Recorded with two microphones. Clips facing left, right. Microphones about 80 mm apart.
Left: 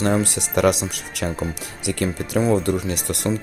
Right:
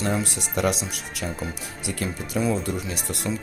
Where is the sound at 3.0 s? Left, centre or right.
Left.